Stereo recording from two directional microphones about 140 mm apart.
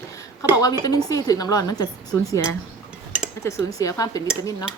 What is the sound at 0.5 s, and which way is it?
A woman's voice, 25° left (ahead or behind).